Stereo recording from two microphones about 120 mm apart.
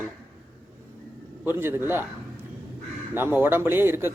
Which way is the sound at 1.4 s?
20° right (ahead or behind).